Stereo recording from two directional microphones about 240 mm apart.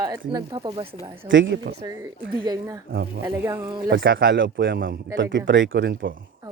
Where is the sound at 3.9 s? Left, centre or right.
Right.